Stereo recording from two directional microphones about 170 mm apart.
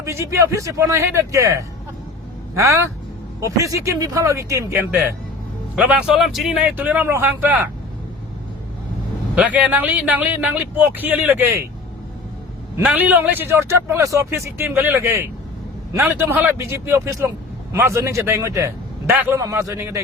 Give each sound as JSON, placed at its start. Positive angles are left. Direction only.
{"t": 0.0, "sound": "speech", "side_deg": -15}
{"t": 9.3, "sound": "speech", "side_deg": -10}
{"t": 12.7, "sound": "speech", "side_deg": -10}